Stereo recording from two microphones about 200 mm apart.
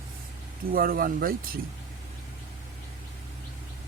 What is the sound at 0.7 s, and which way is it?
Speech, 45° right (ahead or behind).